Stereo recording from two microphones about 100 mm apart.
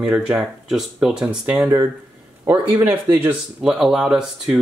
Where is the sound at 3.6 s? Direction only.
5° right (ahead or behind).